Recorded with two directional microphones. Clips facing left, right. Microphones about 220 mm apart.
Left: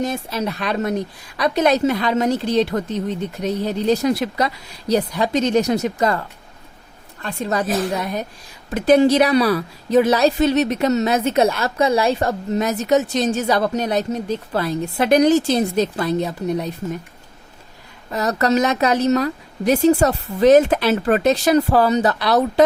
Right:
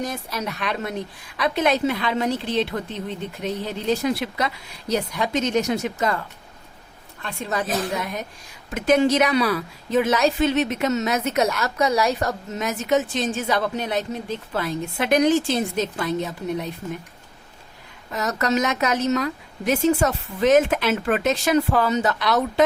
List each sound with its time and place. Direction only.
0.0 s a woman's voice: 25° left (ahead or behind)
18.1 s a woman's voice: 35° left (ahead or behind)